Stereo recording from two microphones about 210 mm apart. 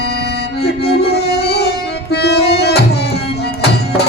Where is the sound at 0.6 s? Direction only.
50° left (ahead or behind).